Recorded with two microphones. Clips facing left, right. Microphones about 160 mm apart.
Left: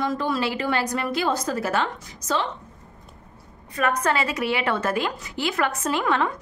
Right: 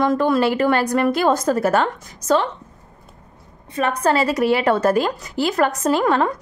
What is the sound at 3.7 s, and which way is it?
A woman's voice, 30° right (ahead or behind).